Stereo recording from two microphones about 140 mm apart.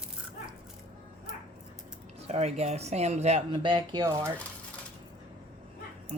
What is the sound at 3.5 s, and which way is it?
Speech, 35° right (ahead or behind).